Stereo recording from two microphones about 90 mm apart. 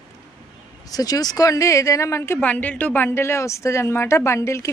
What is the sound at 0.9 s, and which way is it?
Speech, 45° left (ahead or behind).